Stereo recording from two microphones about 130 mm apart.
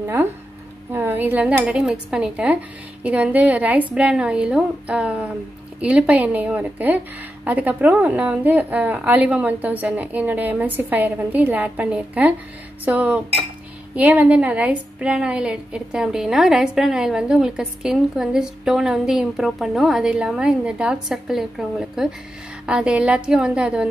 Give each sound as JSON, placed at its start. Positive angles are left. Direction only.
{"t": 0.0, "sound": "a woman's voice", "side_deg": -15}